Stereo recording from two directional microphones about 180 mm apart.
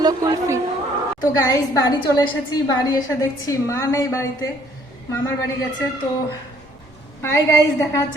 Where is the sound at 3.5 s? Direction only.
15° left (ahead or behind).